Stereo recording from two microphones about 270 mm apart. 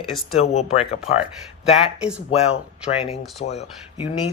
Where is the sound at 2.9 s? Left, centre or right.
Left.